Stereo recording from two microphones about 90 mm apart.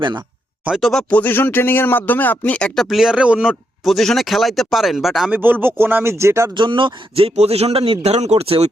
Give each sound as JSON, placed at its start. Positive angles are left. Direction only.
{"t": 0.8, "sound": "speech", "side_deg": 0}
{"t": 1.1, "sound": "speech", "side_deg": 20}
{"t": 3.8, "sound": "speech", "side_deg": 0}
{"t": 5.3, "sound": "speech", "side_deg": -20}
{"t": 6.6, "sound": "speech", "side_deg": -65}